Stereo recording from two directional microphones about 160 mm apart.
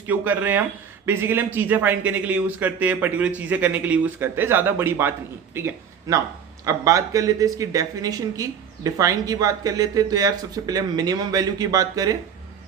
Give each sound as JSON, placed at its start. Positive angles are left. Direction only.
{"t": 0.1, "sound": "speech", "side_deg": -10}